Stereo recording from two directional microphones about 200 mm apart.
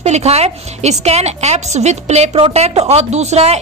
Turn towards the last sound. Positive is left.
turn(degrees=-30)  # may be behind; listen again after turning